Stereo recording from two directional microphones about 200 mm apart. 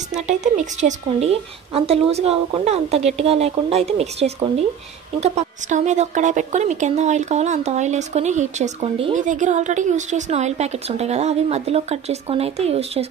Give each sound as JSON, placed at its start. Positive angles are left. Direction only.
{"t": 0.1, "sound": "a woman's voice", "side_deg": -35}